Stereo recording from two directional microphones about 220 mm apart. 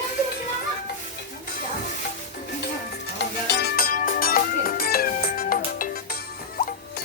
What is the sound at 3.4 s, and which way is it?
Music, 50° left (ahead or behind).